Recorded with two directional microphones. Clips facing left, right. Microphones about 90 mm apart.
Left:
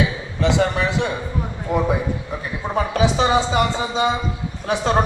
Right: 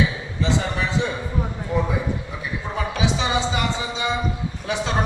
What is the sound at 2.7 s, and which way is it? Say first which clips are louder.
Speech: left 6 dB; 45° left (ahead or behind).